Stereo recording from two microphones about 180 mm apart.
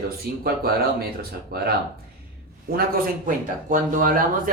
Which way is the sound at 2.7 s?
55° right (ahead or behind).